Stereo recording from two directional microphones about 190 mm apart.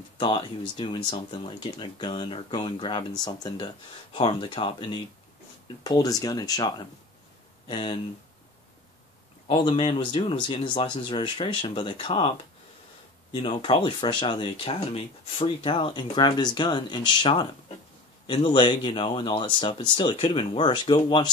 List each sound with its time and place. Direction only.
0.2 s speech: 25° left (ahead or behind)
9.5 s speech: 25° left (ahead or behind)
13.3 s speech: 30° left (ahead or behind)